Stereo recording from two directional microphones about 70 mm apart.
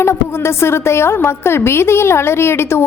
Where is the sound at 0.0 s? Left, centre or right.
Left.